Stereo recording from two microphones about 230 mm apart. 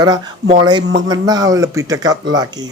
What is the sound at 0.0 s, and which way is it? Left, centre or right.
Speech, centre.